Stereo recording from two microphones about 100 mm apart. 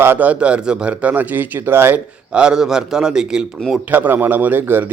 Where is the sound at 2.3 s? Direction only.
10° right (ahead or behind).